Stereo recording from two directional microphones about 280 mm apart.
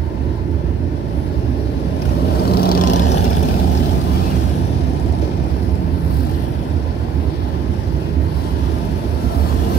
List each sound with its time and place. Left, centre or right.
2.5 s vehicle: left
2.8 s vehicle: left